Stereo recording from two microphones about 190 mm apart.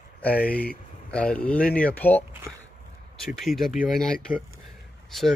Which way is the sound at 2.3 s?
15° right (ahead or behind).